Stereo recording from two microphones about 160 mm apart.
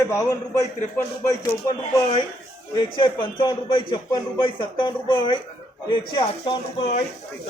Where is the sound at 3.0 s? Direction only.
30° left (ahead or behind).